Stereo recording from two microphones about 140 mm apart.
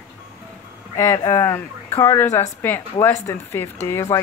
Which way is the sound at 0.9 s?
20° left (ahead or behind).